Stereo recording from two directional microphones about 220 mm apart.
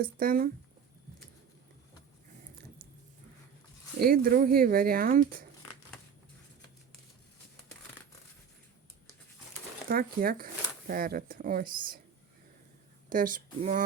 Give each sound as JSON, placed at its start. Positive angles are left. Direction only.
{"t": 0.0, "sound": "speech", "side_deg": -40}
{"t": 4.0, "sound": "speech", "side_deg": -40}
{"t": 9.9, "sound": "speech", "side_deg": -40}
{"t": 13.1, "sound": "speech", "side_deg": -40}